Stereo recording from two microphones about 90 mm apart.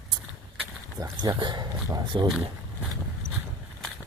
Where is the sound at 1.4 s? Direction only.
60° right (ahead or behind).